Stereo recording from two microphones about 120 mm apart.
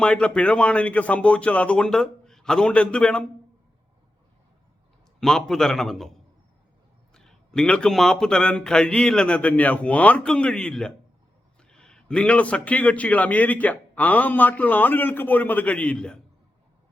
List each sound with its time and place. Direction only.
0.0 s a man's voice: 10° left (ahead or behind)
5.2 s a man's voice: 5° left (ahead or behind)